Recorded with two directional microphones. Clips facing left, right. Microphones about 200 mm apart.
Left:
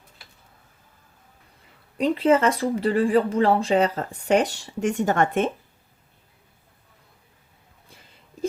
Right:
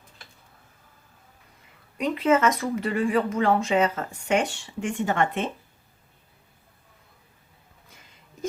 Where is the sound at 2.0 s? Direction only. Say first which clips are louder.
Left 3 dB; 30° left (ahead or behind).